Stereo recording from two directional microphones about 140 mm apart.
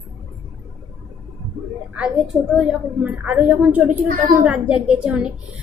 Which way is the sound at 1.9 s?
5° right (ahead or behind).